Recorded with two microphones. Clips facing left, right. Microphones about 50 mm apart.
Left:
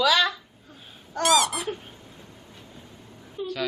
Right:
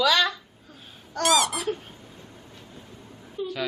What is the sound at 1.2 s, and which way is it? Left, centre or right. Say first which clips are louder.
Speech: left 1 dB; centre.